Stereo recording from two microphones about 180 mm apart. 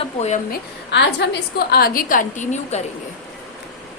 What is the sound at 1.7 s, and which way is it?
A woman's voice, 55° left (ahead or behind).